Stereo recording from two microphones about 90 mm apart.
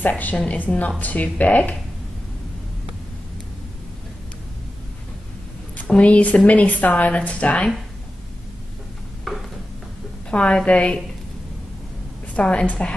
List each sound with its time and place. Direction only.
0.0 s a woman's voice: 20° left (ahead or behind)
5.8 s a woman's voice: 15° left (ahead or behind)
10.3 s a woman's voice: 10° left (ahead or behind)
12.4 s a woman's voice: 15° left (ahead or behind)